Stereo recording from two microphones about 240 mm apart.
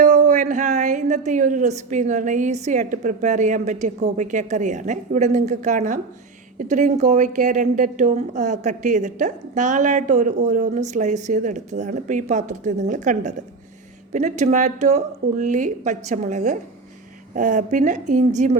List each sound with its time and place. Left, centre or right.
0.0 s a woman's voice: right